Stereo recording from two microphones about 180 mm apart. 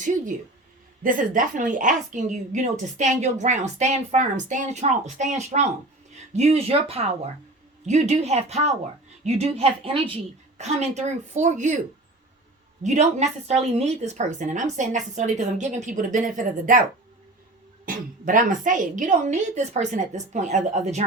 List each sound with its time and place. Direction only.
0.0 s a sound: 45° right (ahead or behind)
1.0 s a woman's voice: 50° right (ahead or behind)
12.8 s a woman's voice: 40° right (ahead or behind)
17.8 s a woman's voice: 50° right (ahead or behind)